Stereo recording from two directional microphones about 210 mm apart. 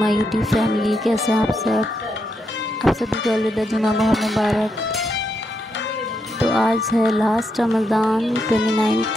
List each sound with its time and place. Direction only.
0.0 s music: centre (ahead or behind)
6.4 s music: centre (ahead or behind)